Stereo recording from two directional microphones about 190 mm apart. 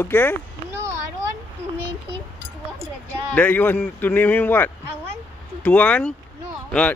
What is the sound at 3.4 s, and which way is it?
A man's voice, 10° left (ahead or behind).